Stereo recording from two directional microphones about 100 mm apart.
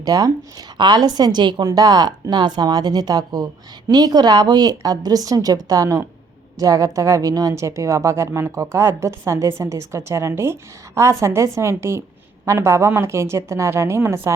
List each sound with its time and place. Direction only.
0.0 s a woman's voice: 40° right (ahead or behind)
1.7 s a woman's voice: 40° right (ahead or behind)